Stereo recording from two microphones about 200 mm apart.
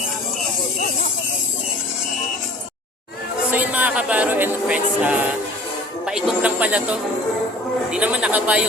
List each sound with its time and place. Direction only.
3.5 s music: 10° right (ahead or behind)